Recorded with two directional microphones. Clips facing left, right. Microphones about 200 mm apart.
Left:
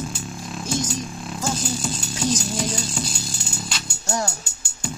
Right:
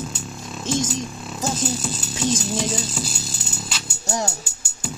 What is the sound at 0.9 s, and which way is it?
Speech, centre (ahead or behind).